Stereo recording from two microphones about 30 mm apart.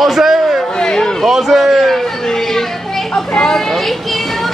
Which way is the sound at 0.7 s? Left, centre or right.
Left.